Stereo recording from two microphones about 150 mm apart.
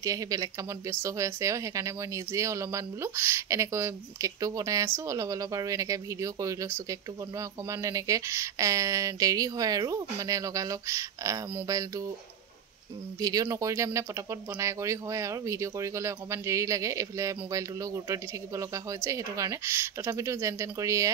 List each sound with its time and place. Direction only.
0.0 s speech: 20° right (ahead or behind)
13.2 s speech: 25° right (ahead or behind)